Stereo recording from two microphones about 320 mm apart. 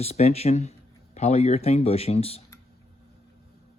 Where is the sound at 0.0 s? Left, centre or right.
Centre.